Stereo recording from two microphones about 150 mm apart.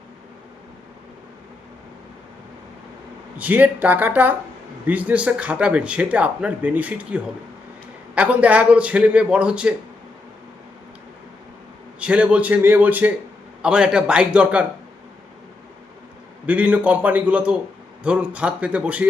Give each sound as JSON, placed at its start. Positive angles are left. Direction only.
{"t": 3.3, "sound": "speech", "side_deg": -10}
{"t": 11.9, "sound": "speech", "side_deg": -10}
{"t": 16.5, "sound": "speech", "side_deg": -10}